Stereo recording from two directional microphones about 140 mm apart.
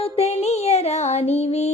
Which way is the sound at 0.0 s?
50° left (ahead or behind).